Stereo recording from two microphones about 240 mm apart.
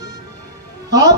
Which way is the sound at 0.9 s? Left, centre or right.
Centre.